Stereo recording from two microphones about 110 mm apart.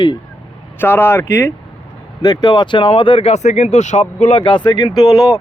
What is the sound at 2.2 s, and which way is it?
Speech, 40° left (ahead or behind).